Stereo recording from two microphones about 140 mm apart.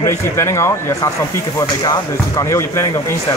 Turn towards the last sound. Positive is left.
turn(degrees=20)  # may be behind; listen again after turning